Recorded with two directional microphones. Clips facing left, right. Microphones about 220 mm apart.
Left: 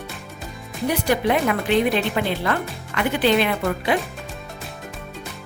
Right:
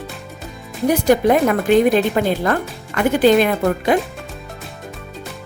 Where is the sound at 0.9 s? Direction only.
45° right (ahead or behind).